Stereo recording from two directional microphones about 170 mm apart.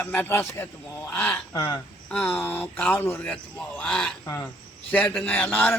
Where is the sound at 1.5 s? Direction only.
25° left (ahead or behind).